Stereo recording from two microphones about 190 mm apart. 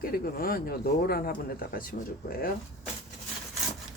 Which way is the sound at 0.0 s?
50° left (ahead or behind).